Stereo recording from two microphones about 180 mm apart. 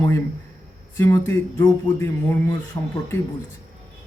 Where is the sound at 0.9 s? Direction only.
15° left (ahead or behind).